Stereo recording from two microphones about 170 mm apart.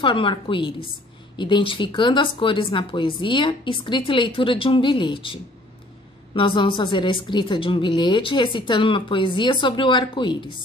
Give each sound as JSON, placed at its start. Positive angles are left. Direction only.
{"t": 0.0, "sound": "speech", "side_deg": 30}